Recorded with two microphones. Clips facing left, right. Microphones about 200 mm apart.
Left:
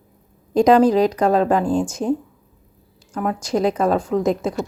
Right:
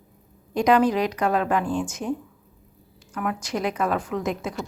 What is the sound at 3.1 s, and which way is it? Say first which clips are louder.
A woman's voice: left 6 dB; 30° left (ahead or behind).